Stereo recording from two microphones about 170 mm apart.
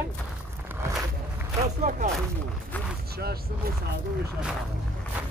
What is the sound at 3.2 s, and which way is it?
Speech, 65° right (ahead or behind).